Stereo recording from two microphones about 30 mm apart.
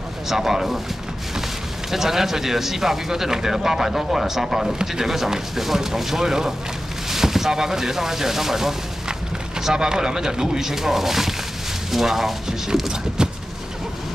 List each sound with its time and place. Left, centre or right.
0.3 s speech: centre
1.9 s speech: centre
10.6 s speech: centre
13.2 s vehicle: right